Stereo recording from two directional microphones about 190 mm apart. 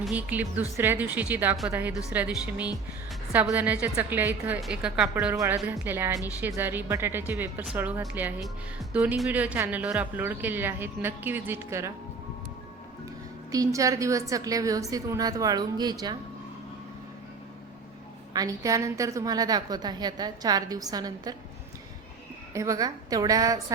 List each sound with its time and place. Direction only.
0.0 s speech: 5° right (ahead or behind)
13.5 s speech: 15° right (ahead or behind)
18.3 s a woman's voice: 15° right (ahead or behind)
22.5 s speech: 15° right (ahead or behind)